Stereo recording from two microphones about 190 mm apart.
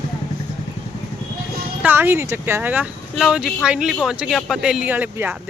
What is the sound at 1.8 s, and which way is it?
Speech, 10° right (ahead or behind).